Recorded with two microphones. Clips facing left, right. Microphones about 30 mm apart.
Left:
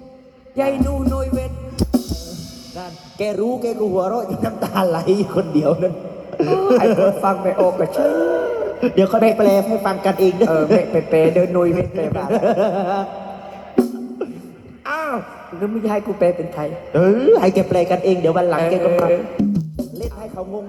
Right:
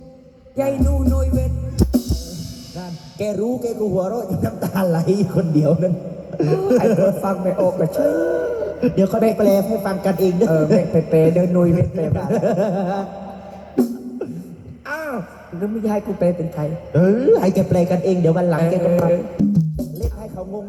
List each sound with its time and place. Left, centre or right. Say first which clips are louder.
0.5 s music: left 1 dB; left
3.2 s a man's voice: left 1 dB; left
8.9 s a man's voice: left 3 dB; left
14.8 s a woman's voice: left 3 dB; left
16.9 s a woman's voice: left 2 dB; left